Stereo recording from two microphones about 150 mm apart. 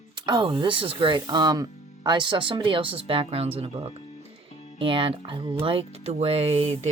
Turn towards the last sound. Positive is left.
turn(degrees=-40)  # may be behind; listen again after turning